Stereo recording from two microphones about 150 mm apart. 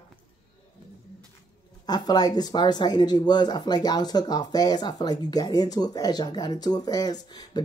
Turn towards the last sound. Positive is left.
turn(degrees=30)  # may be behind; listen again after turning